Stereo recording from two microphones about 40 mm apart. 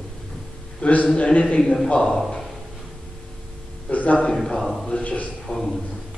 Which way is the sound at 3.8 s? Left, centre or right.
Left.